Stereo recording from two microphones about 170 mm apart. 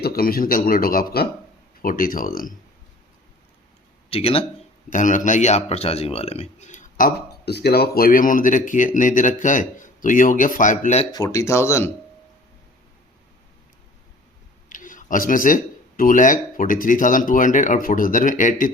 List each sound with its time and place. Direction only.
0.0 s a man's voice: 60° left (ahead or behind)
4.1 s speech: 35° left (ahead or behind)
4.9 s a man's voice: 50° left (ahead or behind)
11.1 s speech: 20° left (ahead or behind)
14.7 s speech: 50° left (ahead or behind)